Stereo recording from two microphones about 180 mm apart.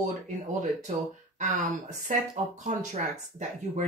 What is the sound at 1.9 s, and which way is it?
Speech, 40° right (ahead or behind).